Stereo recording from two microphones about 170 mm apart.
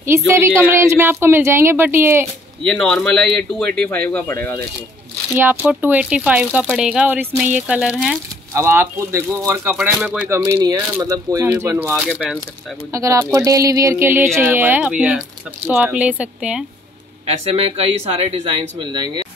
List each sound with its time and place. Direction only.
0.3 s speech: 15° right (ahead or behind)
2.6 s speech: 5° left (ahead or behind)
5.3 s speech: 10° right (ahead or behind)
8.5 s speech: 15° right (ahead or behind)
12.9 s speech: 20° right (ahead or behind)
17.5 s speech: 35° right (ahead or behind)